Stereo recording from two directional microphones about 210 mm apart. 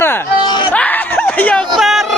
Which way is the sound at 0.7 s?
5° left (ahead or behind).